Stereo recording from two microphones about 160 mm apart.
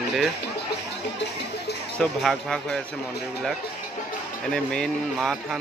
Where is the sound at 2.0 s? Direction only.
5° left (ahead or behind).